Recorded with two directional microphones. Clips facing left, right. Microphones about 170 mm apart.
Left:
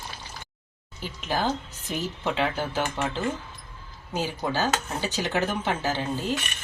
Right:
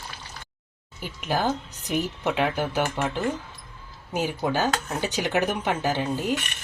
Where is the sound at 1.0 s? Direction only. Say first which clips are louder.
Right 2 dB; 15° right (ahead or behind).